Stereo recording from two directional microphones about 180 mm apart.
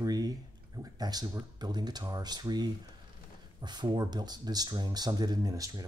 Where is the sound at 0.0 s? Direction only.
20° right (ahead or behind).